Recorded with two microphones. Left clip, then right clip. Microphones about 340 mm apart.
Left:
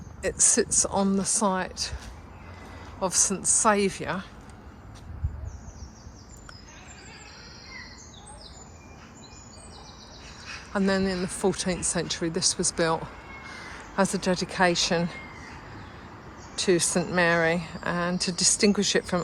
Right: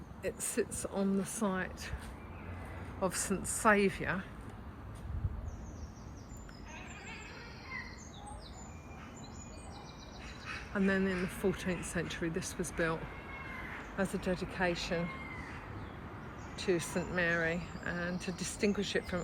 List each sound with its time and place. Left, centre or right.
0.2 s speech: centre
3.0 s speech: centre
10.8 s speech: centre
16.6 s speech: centre